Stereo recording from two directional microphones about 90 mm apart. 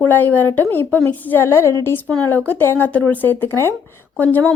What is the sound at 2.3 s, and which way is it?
Speech, 20° left (ahead or behind).